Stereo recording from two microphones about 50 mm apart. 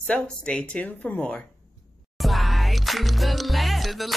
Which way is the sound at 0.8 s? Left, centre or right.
Left.